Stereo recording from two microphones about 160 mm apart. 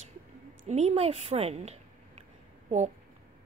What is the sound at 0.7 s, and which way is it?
A woman's voice, 45° right (ahead or behind).